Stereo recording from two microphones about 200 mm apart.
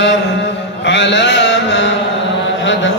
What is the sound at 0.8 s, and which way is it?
Mantra, 60° left (ahead or behind).